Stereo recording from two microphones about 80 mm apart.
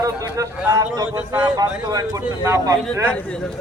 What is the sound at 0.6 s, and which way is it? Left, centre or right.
Speech, right.